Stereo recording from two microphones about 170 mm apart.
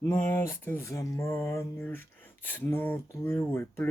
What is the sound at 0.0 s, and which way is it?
Speech, 15° left (ahead or behind).